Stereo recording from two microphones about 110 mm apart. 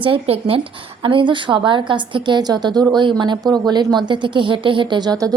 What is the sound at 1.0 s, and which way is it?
A woman's voice, 50° right (ahead or behind).